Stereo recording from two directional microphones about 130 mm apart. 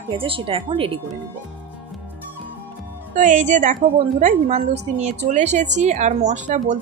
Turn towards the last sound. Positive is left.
turn(degrees=-65)  # may be behind; listen again after turning